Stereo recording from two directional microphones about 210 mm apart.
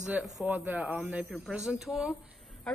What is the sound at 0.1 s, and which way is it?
A woman's voice, 5° right (ahead or behind).